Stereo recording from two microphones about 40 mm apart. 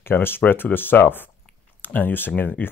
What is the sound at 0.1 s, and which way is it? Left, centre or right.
Speech, left.